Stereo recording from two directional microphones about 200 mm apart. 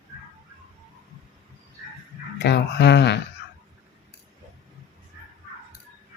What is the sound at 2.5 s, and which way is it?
Speech, 55° left (ahead or behind).